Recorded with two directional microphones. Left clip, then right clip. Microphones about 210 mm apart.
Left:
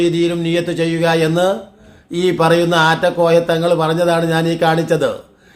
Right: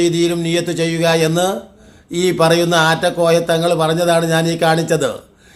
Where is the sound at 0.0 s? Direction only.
Centre (ahead or behind).